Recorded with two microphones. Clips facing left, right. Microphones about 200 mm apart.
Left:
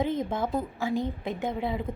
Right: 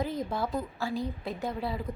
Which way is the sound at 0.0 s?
25° left (ahead or behind).